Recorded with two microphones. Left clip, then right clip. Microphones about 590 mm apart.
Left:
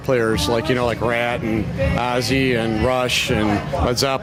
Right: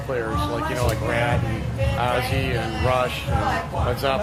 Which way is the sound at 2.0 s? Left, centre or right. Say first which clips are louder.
Left 3 dB; left.